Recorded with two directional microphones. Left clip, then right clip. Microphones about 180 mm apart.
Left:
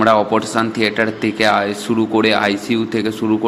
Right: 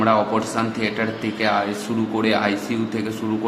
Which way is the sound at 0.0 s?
35° left (ahead or behind).